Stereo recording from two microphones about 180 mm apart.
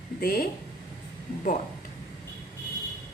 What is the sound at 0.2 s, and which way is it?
Speech, 55° left (ahead or behind).